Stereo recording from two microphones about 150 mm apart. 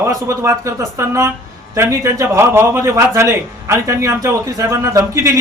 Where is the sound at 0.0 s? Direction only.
20° right (ahead or behind).